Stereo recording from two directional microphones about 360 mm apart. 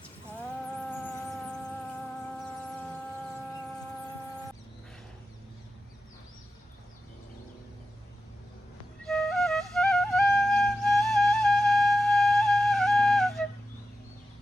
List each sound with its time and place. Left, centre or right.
0.3 s music: centre
9.0 s flute: centre